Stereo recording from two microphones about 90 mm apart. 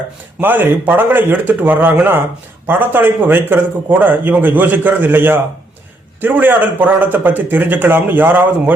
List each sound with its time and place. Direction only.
0.3 s a man's voice: 20° right (ahead or behind)